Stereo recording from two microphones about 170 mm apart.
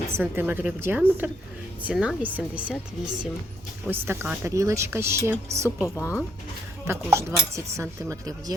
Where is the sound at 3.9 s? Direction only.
15° right (ahead or behind).